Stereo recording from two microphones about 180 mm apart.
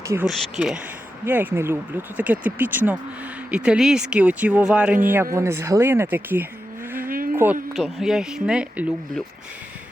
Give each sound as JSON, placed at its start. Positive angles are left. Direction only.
{"t": 0.3, "sound": "speech", "side_deg": 0}
{"t": 7.0, "sound": "vehicle", "side_deg": -50}
{"t": 7.7, "sound": "speech", "side_deg": 0}